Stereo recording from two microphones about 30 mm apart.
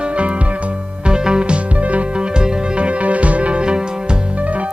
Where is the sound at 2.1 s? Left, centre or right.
Right.